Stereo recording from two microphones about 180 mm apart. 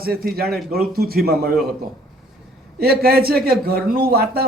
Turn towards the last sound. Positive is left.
turn(degrees=-60)  # may be behind; listen again after turning